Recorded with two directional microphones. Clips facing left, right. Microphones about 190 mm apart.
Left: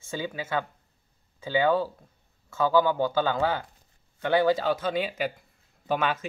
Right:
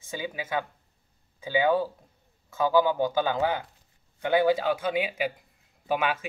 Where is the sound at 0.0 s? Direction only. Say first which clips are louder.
Left 1 dB; 15° right (ahead or behind).